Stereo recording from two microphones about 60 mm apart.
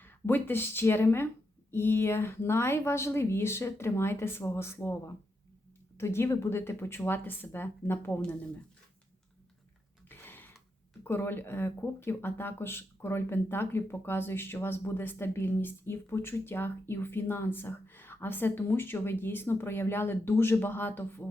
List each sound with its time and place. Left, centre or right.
0.0 s speech: left
10.1 s a sound: left
11.0 s speech: left